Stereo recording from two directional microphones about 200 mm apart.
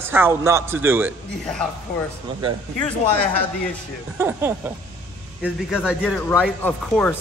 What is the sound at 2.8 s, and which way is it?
Speech, 10° left (ahead or behind).